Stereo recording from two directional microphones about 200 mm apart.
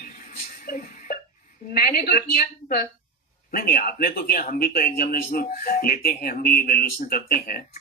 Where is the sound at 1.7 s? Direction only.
45° left (ahead or behind).